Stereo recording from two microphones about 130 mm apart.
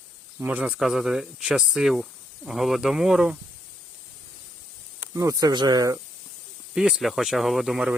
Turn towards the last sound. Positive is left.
turn(degrees=-5)  # may be behind; listen again after turning